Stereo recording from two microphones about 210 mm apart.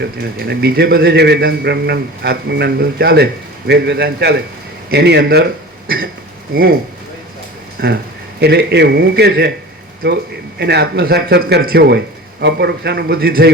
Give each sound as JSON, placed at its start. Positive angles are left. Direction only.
{"t": 0.0, "sound": "a man's voice", "side_deg": -50}
{"t": 6.5, "sound": "a man's voice", "side_deg": -45}
{"t": 7.8, "sound": "a man's voice", "side_deg": -50}